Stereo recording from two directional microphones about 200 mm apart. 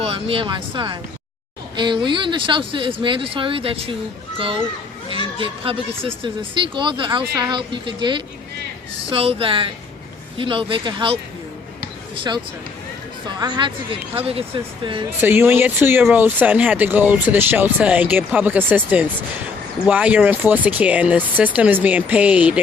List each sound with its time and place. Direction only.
0.0 s a child's voice: 25° right (ahead or behind)
15.2 s speech: 10° right (ahead or behind)